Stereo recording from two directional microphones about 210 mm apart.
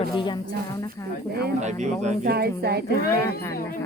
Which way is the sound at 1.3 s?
50° right (ahead or behind).